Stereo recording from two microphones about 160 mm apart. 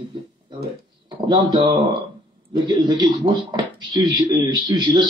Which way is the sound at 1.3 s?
25° right (ahead or behind).